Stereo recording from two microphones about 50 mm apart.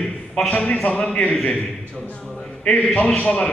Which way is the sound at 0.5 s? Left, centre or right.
Left.